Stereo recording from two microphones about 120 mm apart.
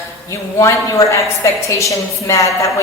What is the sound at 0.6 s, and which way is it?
A woman's voice, 25° left (ahead or behind).